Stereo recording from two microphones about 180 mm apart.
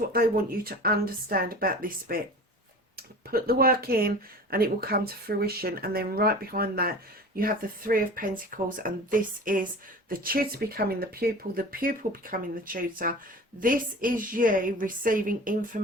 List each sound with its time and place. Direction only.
0.1 s speech: 55° right (ahead or behind)
3.2 s speech: 55° right (ahead or behind)